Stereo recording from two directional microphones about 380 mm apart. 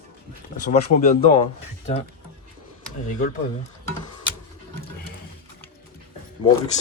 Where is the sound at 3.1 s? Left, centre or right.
Left.